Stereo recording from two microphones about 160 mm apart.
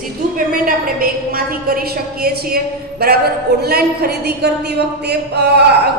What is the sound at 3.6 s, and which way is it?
Speech, 80° right.